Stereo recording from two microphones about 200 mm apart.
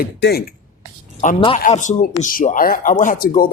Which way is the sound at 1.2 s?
35° left (ahead or behind).